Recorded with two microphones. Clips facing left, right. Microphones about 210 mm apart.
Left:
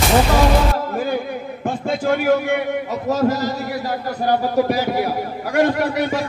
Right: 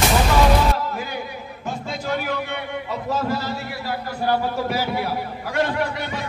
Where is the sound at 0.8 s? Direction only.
50° left (ahead or behind).